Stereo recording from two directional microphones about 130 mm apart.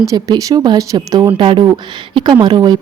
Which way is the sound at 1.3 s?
40° right (ahead or behind).